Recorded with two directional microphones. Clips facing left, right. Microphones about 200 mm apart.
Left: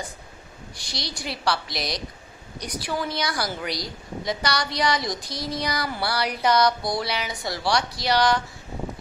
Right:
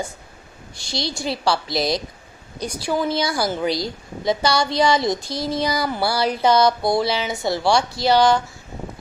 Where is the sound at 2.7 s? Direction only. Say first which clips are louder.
Right 6 dB; 25° right (ahead or behind).